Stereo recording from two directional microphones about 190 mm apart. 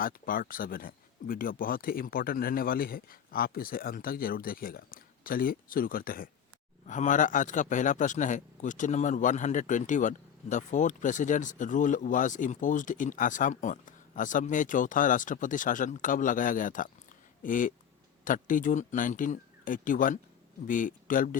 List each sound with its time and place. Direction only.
0.0 s a man's voice: 50° left (ahead or behind)